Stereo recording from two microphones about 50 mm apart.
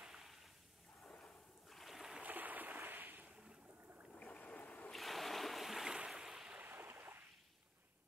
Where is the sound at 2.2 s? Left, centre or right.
Right.